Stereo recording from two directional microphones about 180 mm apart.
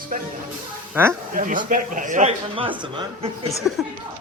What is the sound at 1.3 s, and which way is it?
Speech, 50° right (ahead or behind).